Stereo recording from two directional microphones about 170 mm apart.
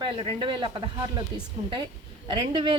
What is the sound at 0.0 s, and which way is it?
Speech, 30° right (ahead or behind).